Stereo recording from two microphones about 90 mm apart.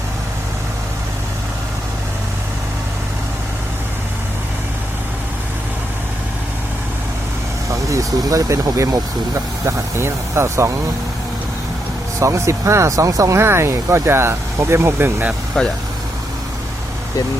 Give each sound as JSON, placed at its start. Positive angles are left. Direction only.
{"t": 7.7, "sound": "speech", "side_deg": -35}
{"t": 12.2, "sound": "speech", "side_deg": -35}
{"t": 15.6, "sound": "speech", "side_deg": 5}